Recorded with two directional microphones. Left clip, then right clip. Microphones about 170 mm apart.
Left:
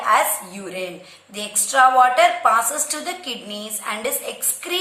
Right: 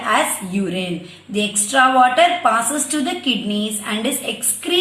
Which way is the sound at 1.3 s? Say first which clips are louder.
Right 2 dB; 35° right (ahead or behind).